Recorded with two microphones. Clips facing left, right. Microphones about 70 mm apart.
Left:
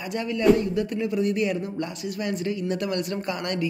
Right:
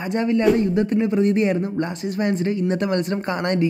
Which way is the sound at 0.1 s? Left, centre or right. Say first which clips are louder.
Right 2 dB; right.